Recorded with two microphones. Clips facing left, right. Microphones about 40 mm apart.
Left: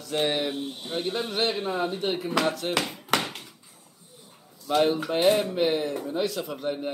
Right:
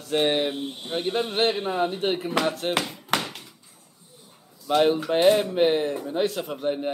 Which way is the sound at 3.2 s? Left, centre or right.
Centre.